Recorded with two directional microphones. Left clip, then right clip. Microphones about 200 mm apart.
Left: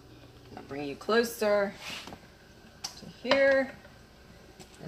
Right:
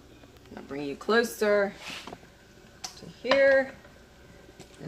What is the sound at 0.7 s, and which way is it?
Speech, 30° right (ahead or behind).